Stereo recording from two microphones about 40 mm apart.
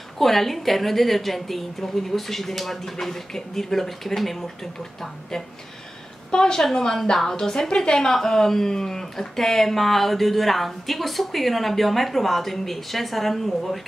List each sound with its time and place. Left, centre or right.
0.2 s a woman's voice: centre
6.3 s a woman's voice: centre